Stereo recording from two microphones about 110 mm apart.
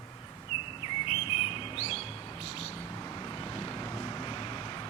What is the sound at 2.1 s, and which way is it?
Bird, 30° left (ahead or behind).